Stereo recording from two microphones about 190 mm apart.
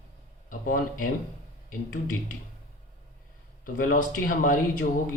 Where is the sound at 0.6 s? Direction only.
45° left (ahead or behind).